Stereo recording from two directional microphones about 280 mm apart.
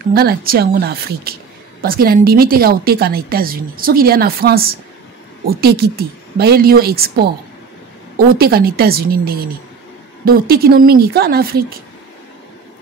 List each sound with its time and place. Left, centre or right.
0.1 s a woman's voice: right
8.2 s a woman's voice: right